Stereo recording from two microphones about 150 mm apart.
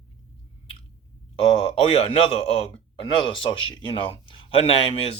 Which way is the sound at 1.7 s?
40° left (ahead or behind).